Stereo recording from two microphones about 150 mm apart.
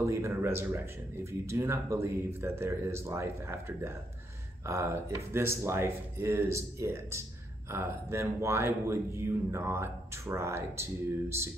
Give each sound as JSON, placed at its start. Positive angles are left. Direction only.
{"t": 0.0, "sound": "speech", "side_deg": -20}